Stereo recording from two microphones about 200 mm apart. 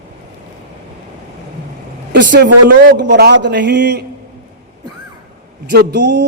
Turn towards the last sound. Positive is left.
turn(degrees=-55)  # may be behind; listen again after turning